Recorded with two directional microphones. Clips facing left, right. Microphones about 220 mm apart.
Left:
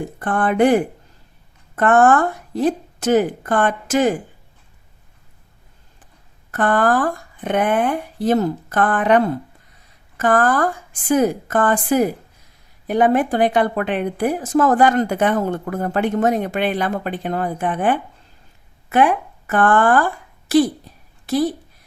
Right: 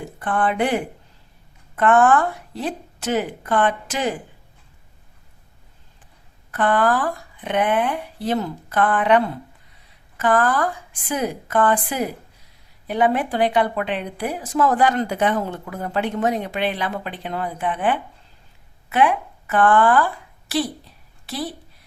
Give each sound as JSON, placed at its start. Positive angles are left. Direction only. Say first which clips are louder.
{"t": 0.2, "sound": "speech", "louder": "left 5 dB", "side_deg": 45}
{"t": 6.5, "sound": "a woman's voice", "louder": "left 2 dB", "side_deg": 45}
{"t": 21.2, "sound": "speech", "louder": "left 10 dB", "side_deg": 45}